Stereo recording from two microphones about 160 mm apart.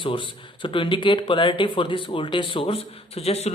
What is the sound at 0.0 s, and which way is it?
Speech, 30° left (ahead or behind).